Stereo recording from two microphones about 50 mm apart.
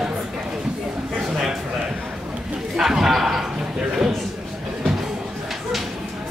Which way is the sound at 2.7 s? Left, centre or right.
Centre.